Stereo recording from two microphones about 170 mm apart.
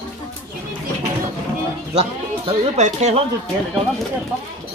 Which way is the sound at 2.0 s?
40° right (ahead or behind).